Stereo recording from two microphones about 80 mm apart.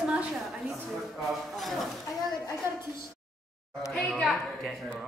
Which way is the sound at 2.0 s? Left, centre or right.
Left.